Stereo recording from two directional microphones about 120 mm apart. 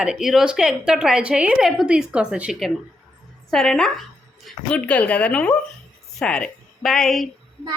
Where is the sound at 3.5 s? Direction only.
5° left (ahead or behind).